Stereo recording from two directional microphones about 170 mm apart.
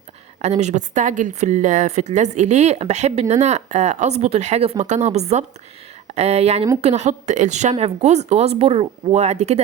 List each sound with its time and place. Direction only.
0.4 s a woman's voice: 40° right (ahead or behind)